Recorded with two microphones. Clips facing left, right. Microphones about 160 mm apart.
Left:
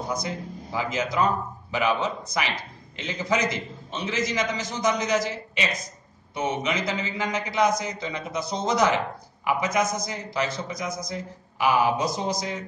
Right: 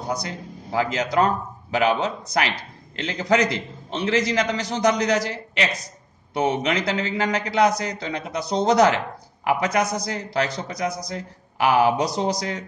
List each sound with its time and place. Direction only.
0.7 s a man's voice: 70° right (ahead or behind)